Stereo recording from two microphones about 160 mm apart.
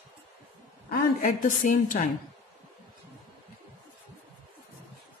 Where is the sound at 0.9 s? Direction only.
60° left (ahead or behind).